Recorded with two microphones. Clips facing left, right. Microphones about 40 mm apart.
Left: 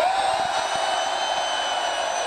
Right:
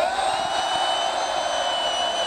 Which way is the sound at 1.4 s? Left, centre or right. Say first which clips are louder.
Right 1 dB; left.